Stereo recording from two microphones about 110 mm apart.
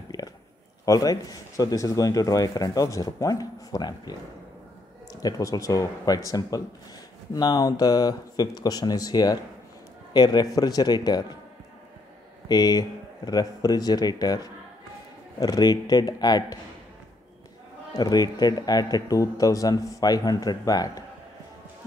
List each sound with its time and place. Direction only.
0.1 s a sound: 30° left (ahead or behind)
0.8 s a man's voice: 30° left (ahead or behind)
5.2 s a man's voice: 30° left (ahead or behind)
12.4 s a man's voice: 35° left (ahead or behind)
17.9 s a man's voice: 35° left (ahead or behind)